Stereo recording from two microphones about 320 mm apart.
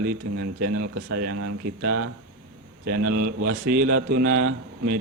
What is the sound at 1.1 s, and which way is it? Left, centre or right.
Speech, right.